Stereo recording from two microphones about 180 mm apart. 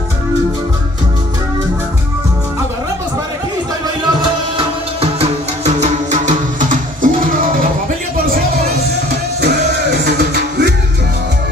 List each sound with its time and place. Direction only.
4.1 s music: 25° right (ahead or behind); by 7.1 s 45° right (ahead or behind)
10.1 s music: 65° right (ahead or behind)